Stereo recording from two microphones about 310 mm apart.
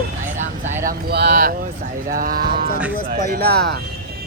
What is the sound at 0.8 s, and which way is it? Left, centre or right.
Speech, right.